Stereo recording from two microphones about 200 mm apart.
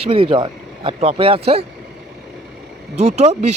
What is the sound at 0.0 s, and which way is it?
Speech, 30° right (ahead or behind).